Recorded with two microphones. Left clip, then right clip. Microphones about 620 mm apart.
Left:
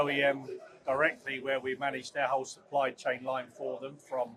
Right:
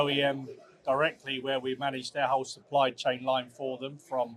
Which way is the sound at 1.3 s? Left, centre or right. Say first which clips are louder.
Right 1 dB; right.